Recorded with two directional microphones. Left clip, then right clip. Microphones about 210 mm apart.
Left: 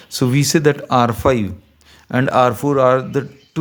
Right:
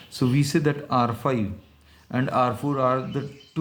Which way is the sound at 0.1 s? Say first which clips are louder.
Left 7 dB; 50° left (ahead or behind).